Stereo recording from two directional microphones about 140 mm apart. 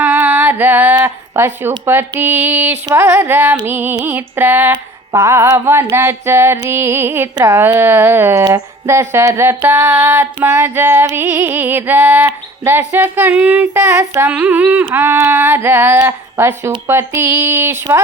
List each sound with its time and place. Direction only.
0.0 s a sound: 15° right (ahead or behind)
0.9 s speech: 15° right (ahead or behind)
1.8 s music: 15° right (ahead or behind)